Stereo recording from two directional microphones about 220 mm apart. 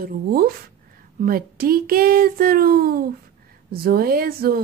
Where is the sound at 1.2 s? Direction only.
40° right (ahead or behind).